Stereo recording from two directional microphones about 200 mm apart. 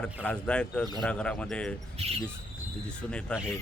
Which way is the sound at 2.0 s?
30° right (ahead or behind).